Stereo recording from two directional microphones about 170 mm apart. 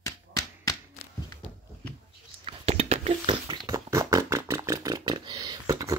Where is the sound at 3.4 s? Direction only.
25° right (ahead or behind).